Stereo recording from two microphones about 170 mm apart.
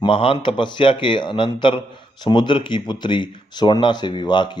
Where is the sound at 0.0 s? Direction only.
30° left (ahead or behind).